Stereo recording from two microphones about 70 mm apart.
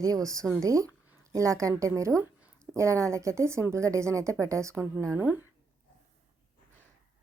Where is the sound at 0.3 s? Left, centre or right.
Right.